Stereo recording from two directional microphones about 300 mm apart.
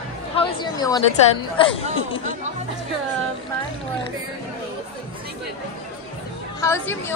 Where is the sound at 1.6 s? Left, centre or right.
Centre.